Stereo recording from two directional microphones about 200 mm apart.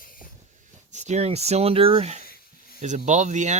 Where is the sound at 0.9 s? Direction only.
35° right (ahead or behind).